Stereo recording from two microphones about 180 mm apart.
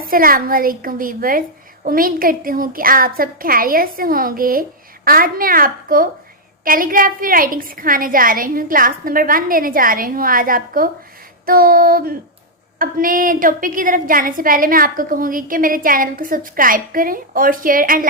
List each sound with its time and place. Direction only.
0.1 s a woman's voice: 55° right (ahead or behind)
11.4 s child singing: 55° right (ahead or behind)
12.8 s a woman's voice: 50° right (ahead or behind)